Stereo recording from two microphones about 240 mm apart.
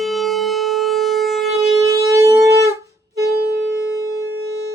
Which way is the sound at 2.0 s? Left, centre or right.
Centre.